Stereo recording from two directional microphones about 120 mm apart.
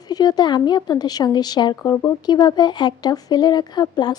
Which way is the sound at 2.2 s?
35° left (ahead or behind).